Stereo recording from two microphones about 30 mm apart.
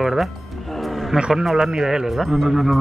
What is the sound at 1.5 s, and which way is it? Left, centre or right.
Speech, centre.